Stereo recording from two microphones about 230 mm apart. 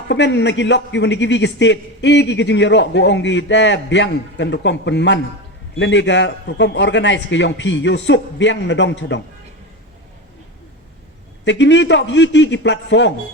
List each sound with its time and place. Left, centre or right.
0.1 s a man's voice: left
11.4 s a man's voice: left